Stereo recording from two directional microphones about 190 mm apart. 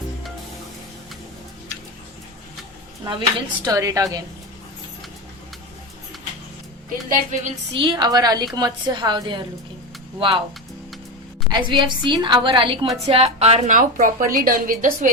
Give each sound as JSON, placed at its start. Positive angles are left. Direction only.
{"t": 3.0, "sound": "a woman's voice", "side_deg": -25}
{"t": 7.7, "sound": "a woman's voice", "side_deg": -25}
{"t": 11.5, "sound": "a woman's voice", "side_deg": -25}